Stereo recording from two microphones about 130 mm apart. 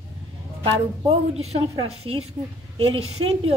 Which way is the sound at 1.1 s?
55° right (ahead or behind).